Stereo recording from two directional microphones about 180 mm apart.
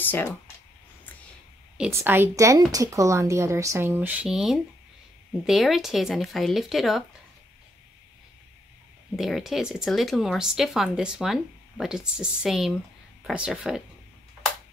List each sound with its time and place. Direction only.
0.0 s speech: 10° left (ahead or behind)
1.8 s speech: 10° right (ahead or behind)
9.1 s speech: centre (ahead or behind)